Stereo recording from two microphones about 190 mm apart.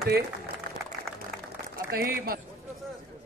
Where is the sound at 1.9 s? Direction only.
50° right (ahead or behind).